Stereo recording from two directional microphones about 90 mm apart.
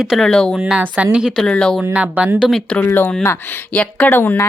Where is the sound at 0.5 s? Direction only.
Centre (ahead or behind).